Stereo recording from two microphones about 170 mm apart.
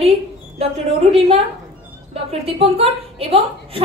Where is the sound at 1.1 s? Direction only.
35° right (ahead or behind).